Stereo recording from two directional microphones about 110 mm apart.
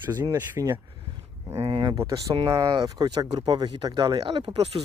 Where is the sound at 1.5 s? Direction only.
50° right (ahead or behind).